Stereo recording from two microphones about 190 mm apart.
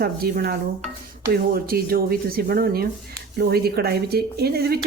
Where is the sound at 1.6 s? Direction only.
50° right (ahead or behind).